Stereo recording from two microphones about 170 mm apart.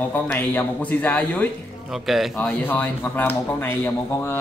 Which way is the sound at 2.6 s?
10° left (ahead or behind).